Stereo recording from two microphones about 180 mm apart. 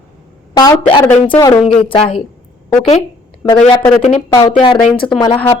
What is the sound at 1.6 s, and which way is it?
Speech, 30° left (ahead or behind).